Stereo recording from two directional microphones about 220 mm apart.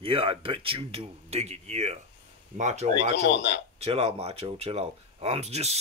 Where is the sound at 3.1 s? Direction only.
55° left (ahead or behind).